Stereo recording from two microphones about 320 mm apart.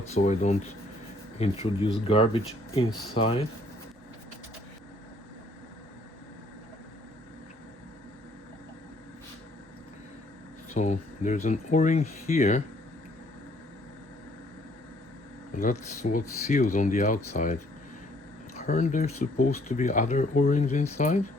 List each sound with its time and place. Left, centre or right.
0.1 s speech: centre
10.8 s speech: left
15.5 s speech: left